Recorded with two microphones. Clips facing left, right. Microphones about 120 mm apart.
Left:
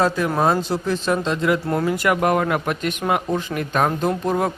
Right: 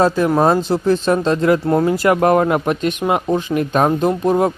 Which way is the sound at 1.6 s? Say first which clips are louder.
Right 6 dB; 25° right (ahead or behind).